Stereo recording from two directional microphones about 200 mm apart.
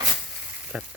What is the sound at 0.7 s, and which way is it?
Speech, 5° right (ahead or behind).